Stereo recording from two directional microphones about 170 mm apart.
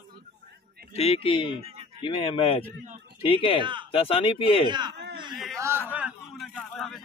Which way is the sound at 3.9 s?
30° left (ahead or behind).